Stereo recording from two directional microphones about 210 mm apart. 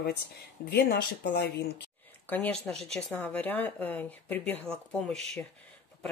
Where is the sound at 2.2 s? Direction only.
10° left (ahead or behind).